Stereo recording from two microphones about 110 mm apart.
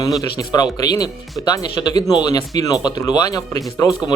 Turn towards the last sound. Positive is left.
turn(degrees=30)  # may be behind; listen again after turning